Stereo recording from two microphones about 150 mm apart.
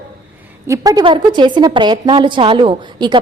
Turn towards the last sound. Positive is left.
turn(degrees=-30)  # may be behind; listen again after turning